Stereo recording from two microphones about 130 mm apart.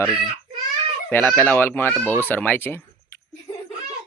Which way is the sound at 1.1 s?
15° left (ahead or behind).